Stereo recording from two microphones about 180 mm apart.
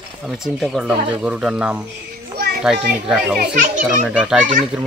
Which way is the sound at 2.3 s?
60° right (ahead or behind).